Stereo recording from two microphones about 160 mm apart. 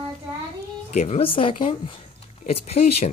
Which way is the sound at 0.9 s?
45° left (ahead or behind).